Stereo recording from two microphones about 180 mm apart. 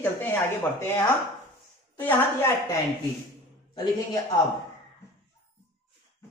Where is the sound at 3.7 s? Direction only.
20° left (ahead or behind).